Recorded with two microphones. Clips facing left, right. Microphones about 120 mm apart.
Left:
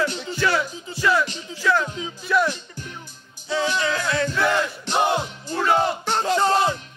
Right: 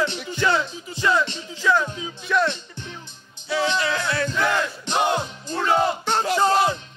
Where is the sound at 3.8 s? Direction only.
25° left (ahead or behind).